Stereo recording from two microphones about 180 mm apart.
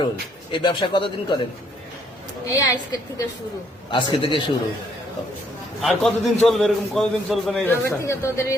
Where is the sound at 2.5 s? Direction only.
20° left (ahead or behind).